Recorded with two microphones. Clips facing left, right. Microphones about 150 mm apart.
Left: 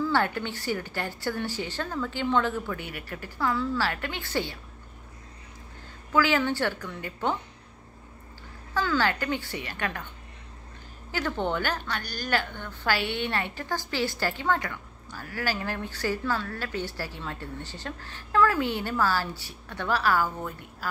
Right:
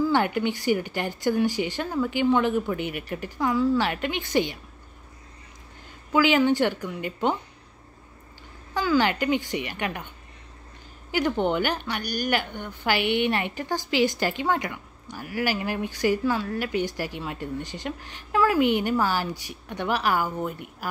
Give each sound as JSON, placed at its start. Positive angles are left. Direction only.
{"t": 0.0, "sound": "a woman's voice", "side_deg": -15}
{"t": 6.1, "sound": "a woman's voice", "side_deg": -15}
{"t": 8.7, "sound": "a woman's voice", "side_deg": -15}
{"t": 11.1, "sound": "a woman's voice", "side_deg": -15}